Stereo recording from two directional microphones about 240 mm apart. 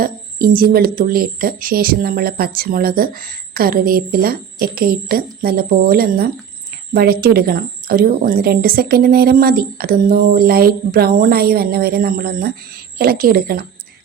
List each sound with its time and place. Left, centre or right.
0.0 s a woman's voice: right